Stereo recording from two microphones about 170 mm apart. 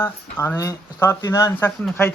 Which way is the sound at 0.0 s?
15° left (ahead or behind).